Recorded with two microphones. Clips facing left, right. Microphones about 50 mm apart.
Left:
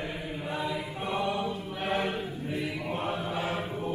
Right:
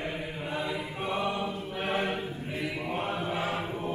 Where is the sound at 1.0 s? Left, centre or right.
Centre.